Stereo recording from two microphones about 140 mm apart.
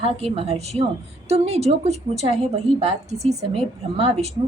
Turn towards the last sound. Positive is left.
turn(degrees=-45)  # may be behind; listen again after turning